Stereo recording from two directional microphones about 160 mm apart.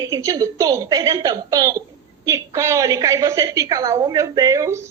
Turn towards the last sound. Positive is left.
turn(degrees=-20)  # may be behind; listen again after turning